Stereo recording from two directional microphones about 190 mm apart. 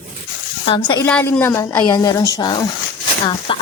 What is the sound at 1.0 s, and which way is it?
A woman's voice, 10° left (ahead or behind).